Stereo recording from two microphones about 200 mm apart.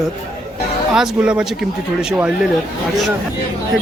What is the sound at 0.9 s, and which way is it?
Speech, 5° right (ahead or behind).